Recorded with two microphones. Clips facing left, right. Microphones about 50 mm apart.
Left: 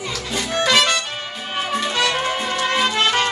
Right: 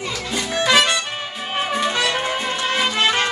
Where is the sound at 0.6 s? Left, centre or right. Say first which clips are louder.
Right 1 dB; centre.